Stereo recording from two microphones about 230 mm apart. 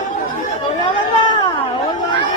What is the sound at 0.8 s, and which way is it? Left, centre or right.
Chatter, centre.